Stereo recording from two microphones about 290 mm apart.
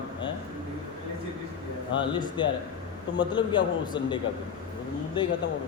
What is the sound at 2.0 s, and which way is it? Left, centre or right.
A man's voice, centre.